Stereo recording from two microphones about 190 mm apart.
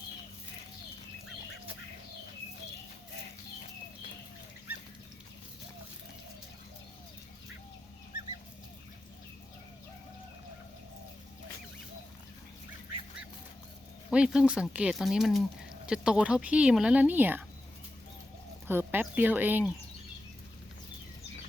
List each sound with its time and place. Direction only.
14.1 s speech: 5° right (ahead or behind)
18.7 s speech: 10° right (ahead or behind)